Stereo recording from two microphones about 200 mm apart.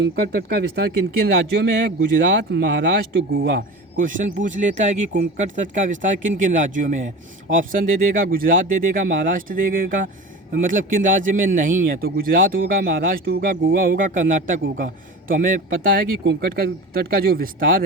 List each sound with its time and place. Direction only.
0.0 s speech: 50° right (ahead or behind)
16.2 s speech: 55° right (ahead or behind)